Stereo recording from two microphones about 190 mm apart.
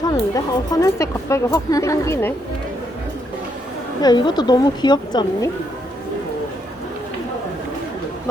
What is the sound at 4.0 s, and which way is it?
Speech, 20° left (ahead or behind).